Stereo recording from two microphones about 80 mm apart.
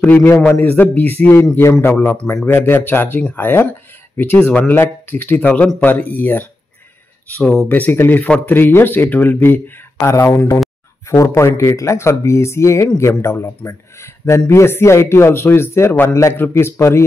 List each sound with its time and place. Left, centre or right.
0.0 s a man's voice: centre
7.3 s speech: centre
7.6 s speech: left
10.0 s a man's voice: left